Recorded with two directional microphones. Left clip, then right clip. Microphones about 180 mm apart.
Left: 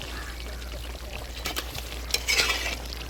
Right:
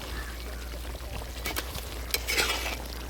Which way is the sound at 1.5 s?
30° right (ahead or behind).